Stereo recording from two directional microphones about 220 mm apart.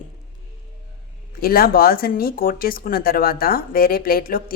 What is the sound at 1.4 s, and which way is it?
Speech, 45° left (ahead or behind).